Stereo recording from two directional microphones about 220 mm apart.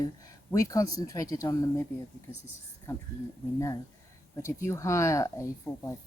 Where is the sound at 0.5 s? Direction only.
15° left (ahead or behind).